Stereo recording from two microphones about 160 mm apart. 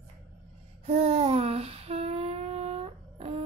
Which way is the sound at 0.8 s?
40° right (ahead or behind).